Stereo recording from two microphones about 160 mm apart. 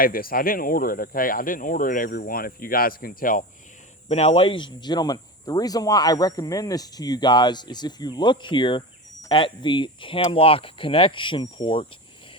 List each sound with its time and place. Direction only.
0.0 s speech: 65° left (ahead or behind)
4.1 s speech: 40° left (ahead or behind)